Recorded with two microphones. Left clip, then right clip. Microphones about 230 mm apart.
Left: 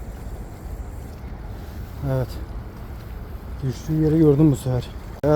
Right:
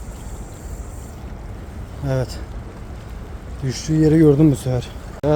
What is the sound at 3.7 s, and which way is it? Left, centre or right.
Speech, centre.